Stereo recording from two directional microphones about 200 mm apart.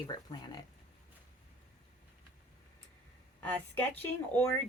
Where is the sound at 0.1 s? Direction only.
20° left (ahead or behind).